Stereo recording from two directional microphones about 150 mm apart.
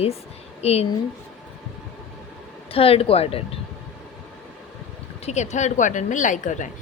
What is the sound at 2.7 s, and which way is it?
Speech, 40° left (ahead or behind).